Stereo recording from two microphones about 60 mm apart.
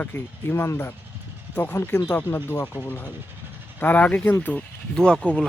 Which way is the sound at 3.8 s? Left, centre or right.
Left.